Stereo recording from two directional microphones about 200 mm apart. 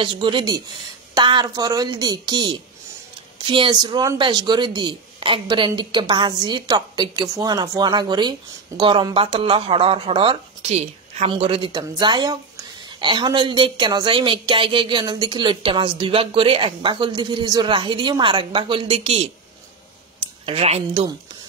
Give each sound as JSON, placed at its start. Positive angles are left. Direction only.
{"t": 0.0, "sound": "speech", "side_deg": -25}
{"t": 20.4, "sound": "speech", "side_deg": -30}